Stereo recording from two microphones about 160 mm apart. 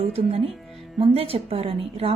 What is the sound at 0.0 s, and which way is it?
A woman's voice, 40° right (ahead or behind).